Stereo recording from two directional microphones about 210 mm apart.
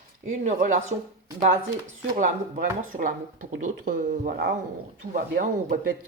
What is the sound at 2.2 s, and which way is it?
Speech, 40° right (ahead or behind).